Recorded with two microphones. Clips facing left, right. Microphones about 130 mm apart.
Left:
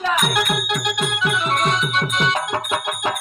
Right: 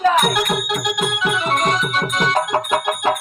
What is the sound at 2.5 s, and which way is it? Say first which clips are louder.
Music: right 5 dB; 40° right (ahead or behind).